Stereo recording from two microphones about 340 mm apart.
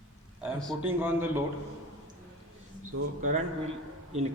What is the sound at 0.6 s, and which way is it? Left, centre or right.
Speech, centre.